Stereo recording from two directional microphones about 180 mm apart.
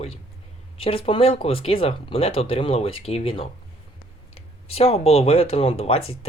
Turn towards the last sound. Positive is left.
turn(degrees=35)  # may be behind; listen again after turning